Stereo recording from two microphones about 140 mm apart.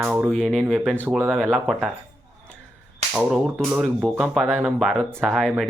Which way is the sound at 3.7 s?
5° right (ahead or behind).